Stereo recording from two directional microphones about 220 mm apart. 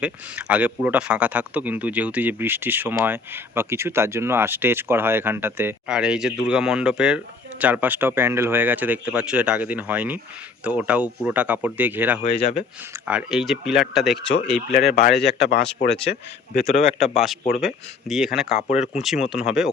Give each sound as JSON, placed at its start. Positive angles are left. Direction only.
{"t": 0.0, "sound": "speech", "side_deg": -5}
{"t": 12.2, "sound": "speech", "side_deg": 25}
{"t": 12.9, "sound": "speech", "side_deg": -5}
{"t": 15.2, "sound": "speech", "side_deg": 50}
{"t": 16.6, "sound": "a man's voice", "side_deg": 30}
{"t": 17.0, "sound": "speech", "side_deg": 0}
{"t": 18.7, "sound": "a man's voice", "side_deg": 30}
{"t": 19.3, "sound": "speech", "side_deg": -5}